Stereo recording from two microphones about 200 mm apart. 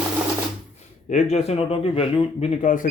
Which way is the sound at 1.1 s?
30° left (ahead or behind).